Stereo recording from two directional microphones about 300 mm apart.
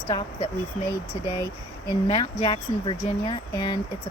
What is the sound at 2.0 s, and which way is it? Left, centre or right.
Speech, centre.